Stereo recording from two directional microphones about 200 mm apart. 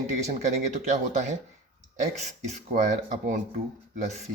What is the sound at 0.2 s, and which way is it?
Speech, 35° right (ahead or behind).